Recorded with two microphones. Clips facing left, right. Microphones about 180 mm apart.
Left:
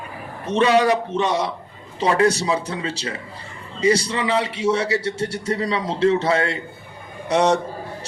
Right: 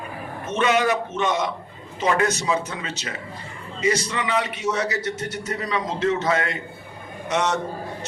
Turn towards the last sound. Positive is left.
turn(degrees=35)  # may be behind; listen again after turning